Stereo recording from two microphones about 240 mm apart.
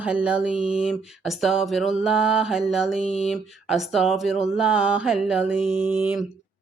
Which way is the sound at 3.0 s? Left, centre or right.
Left.